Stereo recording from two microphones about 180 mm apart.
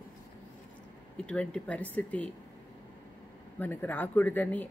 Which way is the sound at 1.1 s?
5° left (ahead or behind).